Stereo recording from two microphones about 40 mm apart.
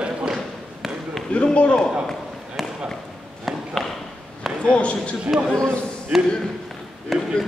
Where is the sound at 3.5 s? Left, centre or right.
Centre.